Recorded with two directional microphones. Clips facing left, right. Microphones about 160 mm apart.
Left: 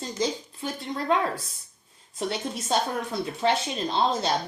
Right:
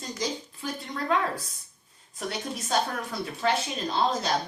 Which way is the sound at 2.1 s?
25° left (ahead or behind).